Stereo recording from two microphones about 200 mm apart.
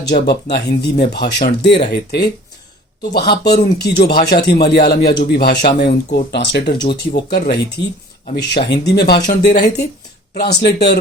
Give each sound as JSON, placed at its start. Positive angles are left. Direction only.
{"t": 0.1, "sound": "speech", "side_deg": 55}
{"t": 8.7, "sound": "speech", "side_deg": 55}